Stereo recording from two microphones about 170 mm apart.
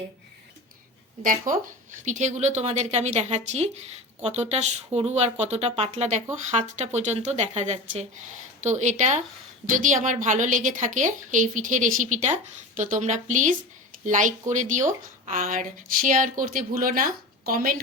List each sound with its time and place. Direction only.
1.6 s a woman's voice: 45° right (ahead or behind)